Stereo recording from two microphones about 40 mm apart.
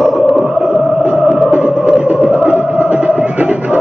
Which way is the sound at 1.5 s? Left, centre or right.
Right.